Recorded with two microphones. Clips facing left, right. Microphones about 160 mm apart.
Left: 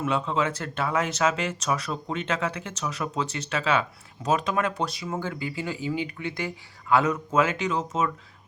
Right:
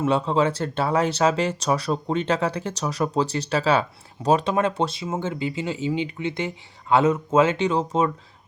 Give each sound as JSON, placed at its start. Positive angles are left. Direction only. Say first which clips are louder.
{"t": 0.0, "sound": "speech", "louder": "right 5 dB", "side_deg": -30}